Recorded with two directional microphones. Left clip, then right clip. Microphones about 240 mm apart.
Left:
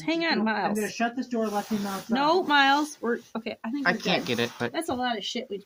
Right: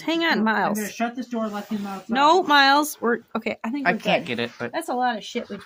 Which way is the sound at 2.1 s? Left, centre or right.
Right.